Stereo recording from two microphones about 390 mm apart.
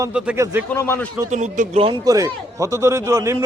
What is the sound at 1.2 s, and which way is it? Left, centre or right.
A man's voice, centre.